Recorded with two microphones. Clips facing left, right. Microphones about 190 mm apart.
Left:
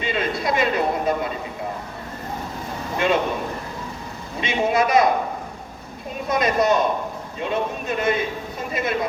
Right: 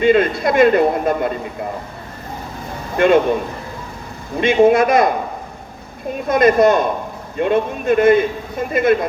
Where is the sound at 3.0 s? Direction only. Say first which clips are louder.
Right 8 dB; 55° right (ahead or behind).